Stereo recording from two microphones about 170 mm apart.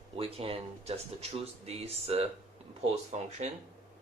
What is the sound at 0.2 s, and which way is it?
Speech, 35° right (ahead or behind).